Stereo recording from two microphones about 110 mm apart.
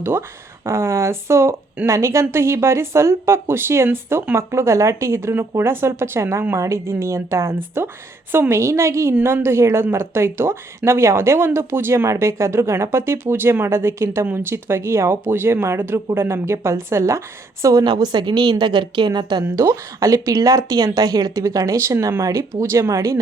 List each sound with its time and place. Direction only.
0.0 s a woman's voice: 20° right (ahead or behind); by 19.5 s 40° right (ahead or behind)
19.5 s a woman's voice: 30° right (ahead or behind)